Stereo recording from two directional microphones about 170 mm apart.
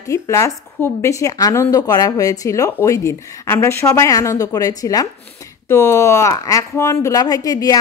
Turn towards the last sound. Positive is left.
turn(degrees=20)  # may be behind; listen again after turning